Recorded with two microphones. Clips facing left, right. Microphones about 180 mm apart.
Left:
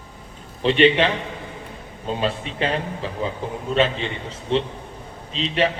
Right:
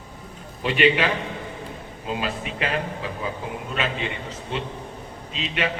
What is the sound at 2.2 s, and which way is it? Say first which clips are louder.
A man's voice: left 5 dB; 30° left (ahead or behind).